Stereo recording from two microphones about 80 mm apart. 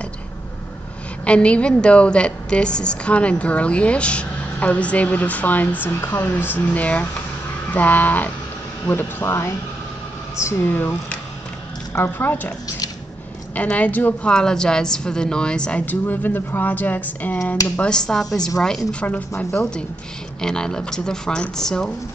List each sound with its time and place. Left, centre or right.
1.2 s a woman's voice: centre; by 9.6 s left
10.6 s speech: left
13.6 s speech: centre
14.3 s a woman's voice: centre
15.8 s speech: left
17.7 s a woman's voice: centre
20.3 s a woman's voice: centre